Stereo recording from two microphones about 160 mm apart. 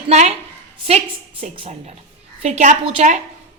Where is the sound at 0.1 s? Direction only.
45° right (ahead or behind).